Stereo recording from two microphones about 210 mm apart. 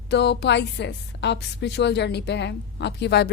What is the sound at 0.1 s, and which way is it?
Speech, 55° left (ahead or behind).